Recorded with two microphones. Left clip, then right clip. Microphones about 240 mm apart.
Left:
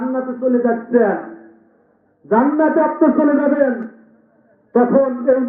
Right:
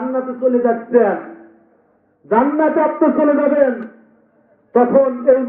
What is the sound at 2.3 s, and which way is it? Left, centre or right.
A man's voice, centre.